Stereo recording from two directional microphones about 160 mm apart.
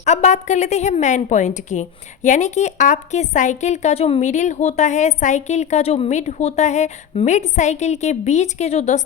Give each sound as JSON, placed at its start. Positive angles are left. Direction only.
{"t": 0.0, "sound": "a woman's voice", "side_deg": 45}